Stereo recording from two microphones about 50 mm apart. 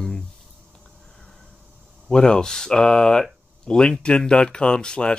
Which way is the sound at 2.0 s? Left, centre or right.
Centre.